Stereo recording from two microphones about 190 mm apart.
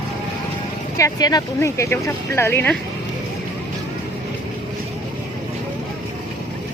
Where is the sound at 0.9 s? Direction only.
20° left (ahead or behind).